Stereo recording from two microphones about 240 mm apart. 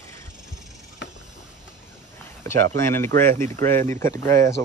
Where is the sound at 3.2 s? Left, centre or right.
Right.